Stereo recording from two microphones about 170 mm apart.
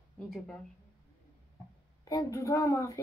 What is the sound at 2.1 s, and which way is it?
Speech, 20° left (ahead or behind).